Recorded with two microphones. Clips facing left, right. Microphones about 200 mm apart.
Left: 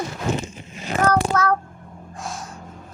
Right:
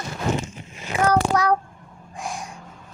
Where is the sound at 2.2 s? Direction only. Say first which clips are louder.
Right 1 dB; 15° right (ahead or behind).